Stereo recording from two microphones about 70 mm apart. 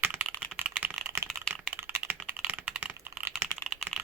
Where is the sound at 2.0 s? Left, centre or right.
Right.